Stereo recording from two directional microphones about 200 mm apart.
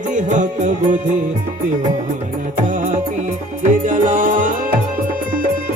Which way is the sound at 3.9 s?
40° right (ahead or behind).